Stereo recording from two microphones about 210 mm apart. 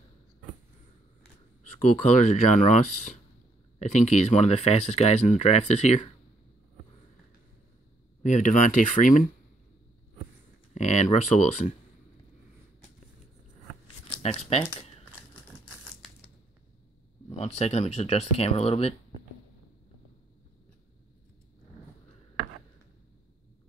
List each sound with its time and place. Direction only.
1.9 s speech: 35° left (ahead or behind)
8.2 s speech: 35° left (ahead or behind)
10.7 s speech: 35° left (ahead or behind)
14.2 s speech: 30° left (ahead or behind)
17.4 s speech: 30° left (ahead or behind)